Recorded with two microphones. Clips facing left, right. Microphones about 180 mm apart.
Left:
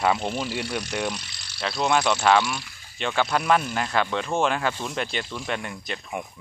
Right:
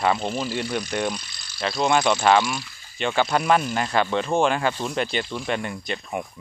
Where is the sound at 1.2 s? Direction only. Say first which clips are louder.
Even; 75° left (ahead or behind).